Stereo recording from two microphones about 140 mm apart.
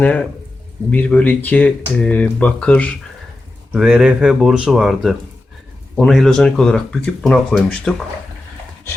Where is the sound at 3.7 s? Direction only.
5° right (ahead or behind).